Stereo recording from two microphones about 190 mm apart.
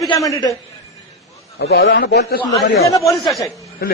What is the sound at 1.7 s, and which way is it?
Speech, 70° left (ahead or behind).